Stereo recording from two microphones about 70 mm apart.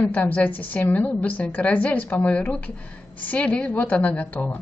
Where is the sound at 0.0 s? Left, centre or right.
Left.